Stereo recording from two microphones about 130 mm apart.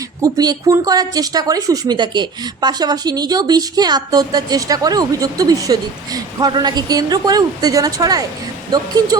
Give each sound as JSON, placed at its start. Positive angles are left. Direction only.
{"t": 0.2, "sound": "speech", "side_deg": -30}